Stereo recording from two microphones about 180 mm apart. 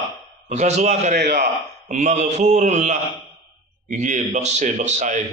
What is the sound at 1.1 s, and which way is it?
Speech, 65° right (ahead or behind).